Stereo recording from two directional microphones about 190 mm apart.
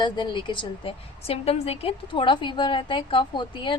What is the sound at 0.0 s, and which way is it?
A woman's voice, 25° left (ahead or behind).